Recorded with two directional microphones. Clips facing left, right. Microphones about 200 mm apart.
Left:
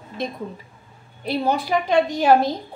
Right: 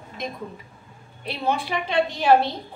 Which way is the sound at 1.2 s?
40° left (ahead or behind).